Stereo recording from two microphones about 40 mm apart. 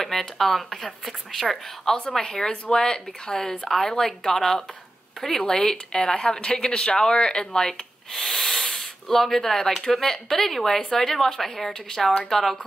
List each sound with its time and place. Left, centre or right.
0.4 s speech: centre
2.0 s speech: centre
8.1 s owl: centre
8.7 s speech: centre